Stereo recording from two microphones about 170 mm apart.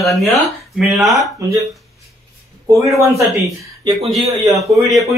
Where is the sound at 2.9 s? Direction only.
20° right (ahead or behind).